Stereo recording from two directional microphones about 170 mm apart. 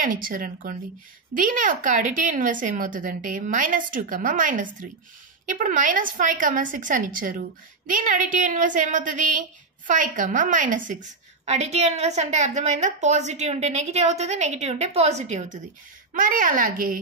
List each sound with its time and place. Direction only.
0.0 s a woman's voice: 55° right (ahead or behind)